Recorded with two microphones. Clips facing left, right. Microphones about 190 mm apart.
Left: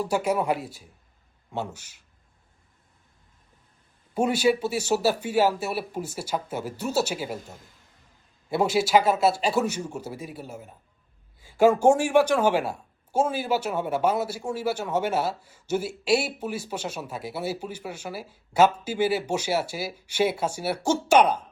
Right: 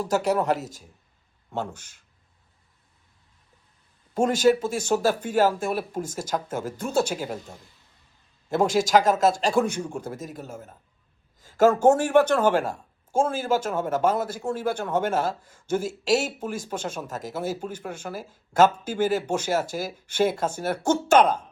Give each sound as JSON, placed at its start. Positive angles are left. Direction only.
{"t": 0.0, "sound": "speech", "side_deg": 10}
{"t": 4.1, "sound": "speech", "side_deg": 10}
{"t": 8.4, "sound": "speech", "side_deg": 10}